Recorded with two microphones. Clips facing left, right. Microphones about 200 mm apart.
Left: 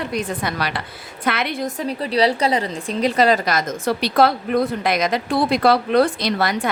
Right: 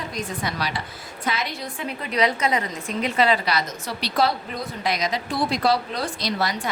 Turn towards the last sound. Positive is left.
turn(degrees=60)  # may be behind; listen again after turning